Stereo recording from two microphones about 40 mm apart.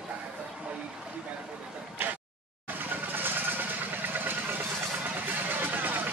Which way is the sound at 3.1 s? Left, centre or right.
Right.